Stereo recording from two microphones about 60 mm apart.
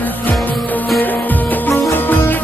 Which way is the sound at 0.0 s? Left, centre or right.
Left.